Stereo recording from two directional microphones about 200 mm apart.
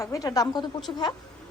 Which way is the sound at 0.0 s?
15° left (ahead or behind).